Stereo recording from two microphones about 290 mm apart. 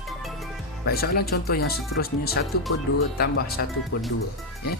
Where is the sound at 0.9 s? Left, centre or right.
Left.